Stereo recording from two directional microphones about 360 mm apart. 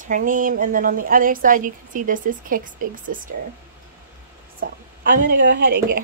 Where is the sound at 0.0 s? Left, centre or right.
Right.